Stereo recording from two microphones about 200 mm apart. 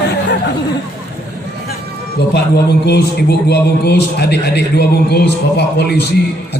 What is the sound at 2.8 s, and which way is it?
A man's voice, 55° left (ahead or behind).